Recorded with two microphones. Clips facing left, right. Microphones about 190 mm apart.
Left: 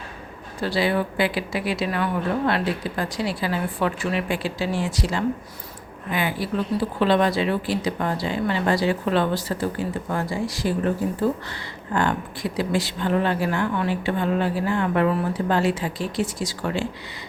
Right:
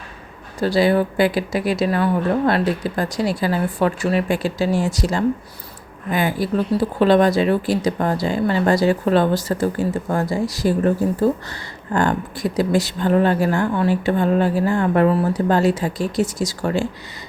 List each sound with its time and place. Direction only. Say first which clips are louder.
0.6 s speech: right 6 dB; 40° right (ahead or behind)